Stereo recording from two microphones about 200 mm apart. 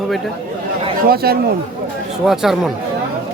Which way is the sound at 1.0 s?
50° right (ahead or behind).